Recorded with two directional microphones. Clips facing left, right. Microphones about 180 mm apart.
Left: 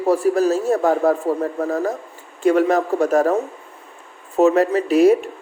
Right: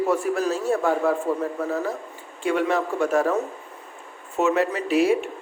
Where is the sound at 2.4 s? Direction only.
40° left (ahead or behind).